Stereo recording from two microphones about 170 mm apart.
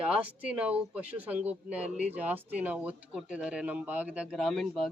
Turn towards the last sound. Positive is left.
turn(degrees=0)  # may be behind; listen again after turning